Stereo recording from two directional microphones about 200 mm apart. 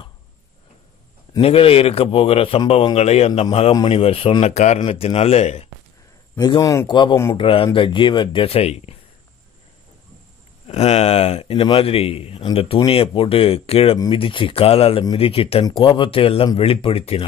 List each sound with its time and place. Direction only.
1.4 s speech: 30° left (ahead or behind)
6.3 s speech: 20° left (ahead or behind)
10.7 s speech: 35° left (ahead or behind)